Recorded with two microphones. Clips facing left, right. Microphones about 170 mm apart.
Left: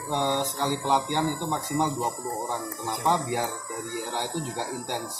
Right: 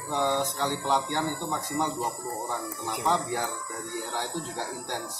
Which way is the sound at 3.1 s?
15° left (ahead or behind).